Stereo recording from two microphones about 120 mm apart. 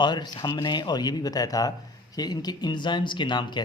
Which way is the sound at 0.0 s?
40° left (ahead or behind).